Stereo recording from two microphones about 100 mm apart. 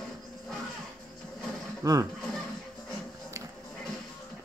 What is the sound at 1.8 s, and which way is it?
Speech, 35° right (ahead or behind).